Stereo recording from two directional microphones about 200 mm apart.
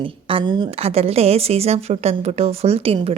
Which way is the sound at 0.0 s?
25° right (ahead or behind).